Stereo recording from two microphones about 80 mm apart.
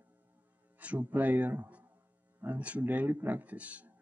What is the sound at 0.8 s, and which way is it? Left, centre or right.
Speech, centre.